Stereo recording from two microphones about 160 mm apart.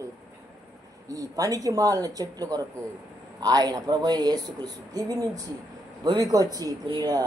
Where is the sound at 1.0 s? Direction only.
20° right (ahead or behind).